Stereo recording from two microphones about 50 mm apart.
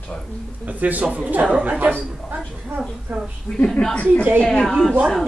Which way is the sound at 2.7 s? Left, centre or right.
Right.